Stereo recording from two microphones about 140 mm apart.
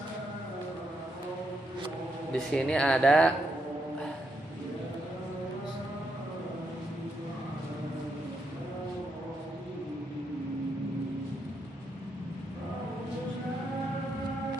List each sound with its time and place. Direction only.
2.3 s speech: 5° left (ahead or behind)